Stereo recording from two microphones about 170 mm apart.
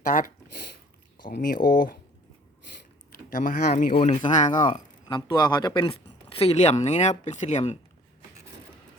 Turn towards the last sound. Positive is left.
turn(degrees=40)  # may be behind; listen again after turning